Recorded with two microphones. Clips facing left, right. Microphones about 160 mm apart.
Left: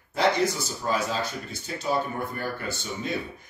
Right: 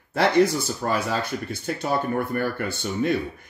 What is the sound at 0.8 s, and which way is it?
Speech, 60° right (ahead or behind).